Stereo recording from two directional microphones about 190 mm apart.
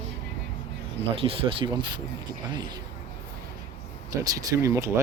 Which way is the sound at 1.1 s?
30° right (ahead or behind).